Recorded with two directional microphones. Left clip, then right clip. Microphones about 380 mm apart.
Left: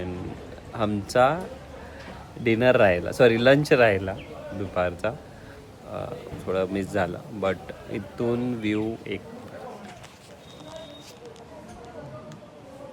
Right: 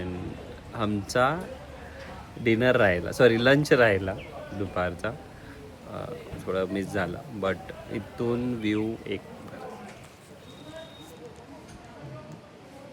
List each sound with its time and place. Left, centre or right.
0.7 s speech: centre
2.4 s speech: centre
6.5 s speech: centre